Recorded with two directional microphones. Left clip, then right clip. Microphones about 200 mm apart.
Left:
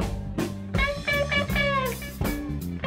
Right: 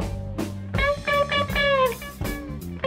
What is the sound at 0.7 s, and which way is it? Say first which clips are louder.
Music: right 4 dB; 30° right (ahead or behind).